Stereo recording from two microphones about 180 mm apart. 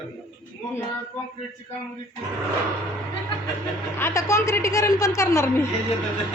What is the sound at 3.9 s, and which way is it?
A man's voice, 15° left (ahead or behind).